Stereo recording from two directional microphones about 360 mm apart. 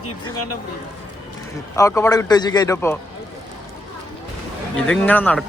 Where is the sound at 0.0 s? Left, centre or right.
Left.